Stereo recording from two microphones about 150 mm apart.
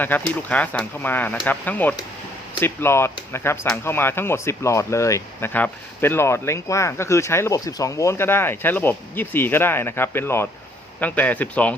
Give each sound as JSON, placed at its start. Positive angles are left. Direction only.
{"t": 0.0, "sound": "speech", "side_deg": 10}